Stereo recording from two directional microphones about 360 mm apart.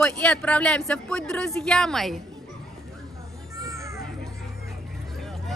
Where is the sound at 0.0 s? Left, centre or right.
Centre.